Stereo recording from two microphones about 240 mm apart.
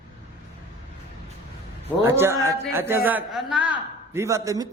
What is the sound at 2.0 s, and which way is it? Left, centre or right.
A man's voice, centre.